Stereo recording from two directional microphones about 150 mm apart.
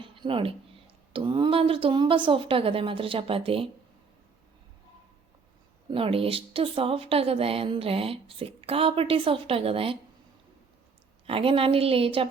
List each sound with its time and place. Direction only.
0.0 s a sound: 35° right (ahead or behind)
1.1 s a woman's voice: 35° right (ahead or behind)
5.9 s a woman's voice: 40° right (ahead or behind)
11.3 s a woman's voice: 40° right (ahead or behind)